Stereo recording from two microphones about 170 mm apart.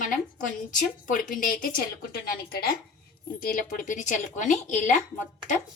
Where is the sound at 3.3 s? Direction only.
50° left (ahead or behind).